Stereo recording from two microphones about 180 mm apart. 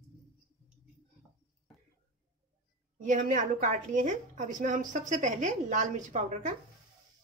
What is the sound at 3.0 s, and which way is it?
A woman's voice, 45° right (ahead or behind).